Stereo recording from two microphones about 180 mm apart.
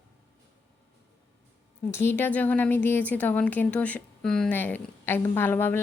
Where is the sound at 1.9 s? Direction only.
15° left (ahead or behind).